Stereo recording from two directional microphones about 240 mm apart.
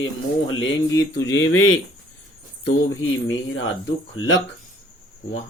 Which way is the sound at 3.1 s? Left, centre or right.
Left.